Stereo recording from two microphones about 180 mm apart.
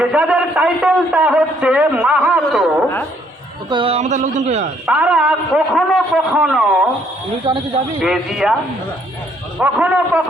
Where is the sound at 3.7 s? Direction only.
30° right (ahead or behind).